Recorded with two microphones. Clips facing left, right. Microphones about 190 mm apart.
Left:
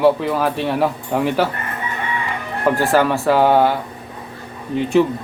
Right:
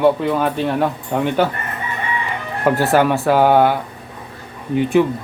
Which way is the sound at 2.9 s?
15° right (ahead or behind).